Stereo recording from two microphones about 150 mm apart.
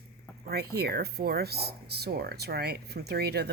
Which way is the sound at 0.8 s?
90° right.